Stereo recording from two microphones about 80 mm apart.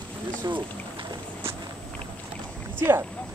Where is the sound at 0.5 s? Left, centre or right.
Right.